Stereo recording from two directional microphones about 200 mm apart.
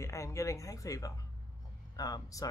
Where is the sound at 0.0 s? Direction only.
15° left (ahead or behind).